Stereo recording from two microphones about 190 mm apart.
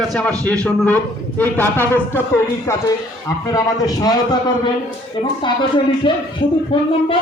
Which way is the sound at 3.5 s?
20° left (ahead or behind).